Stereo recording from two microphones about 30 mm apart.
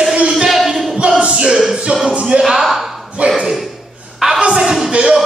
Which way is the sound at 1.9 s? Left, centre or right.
Right.